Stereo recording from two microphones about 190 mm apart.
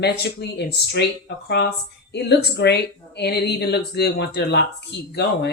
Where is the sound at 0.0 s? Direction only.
60° left (ahead or behind).